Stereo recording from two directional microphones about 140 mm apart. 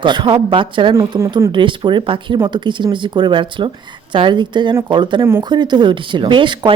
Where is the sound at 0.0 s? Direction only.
35° right (ahead or behind).